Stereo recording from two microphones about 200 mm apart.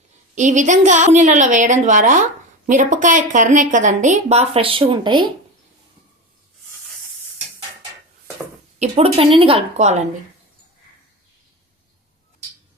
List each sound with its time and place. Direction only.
0.3 s a woman's voice: 40° right (ahead or behind)
8.8 s a woman's voice: 30° right (ahead or behind)